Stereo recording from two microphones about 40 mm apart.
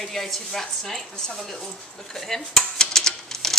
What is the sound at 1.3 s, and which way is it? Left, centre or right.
Dishes, centre.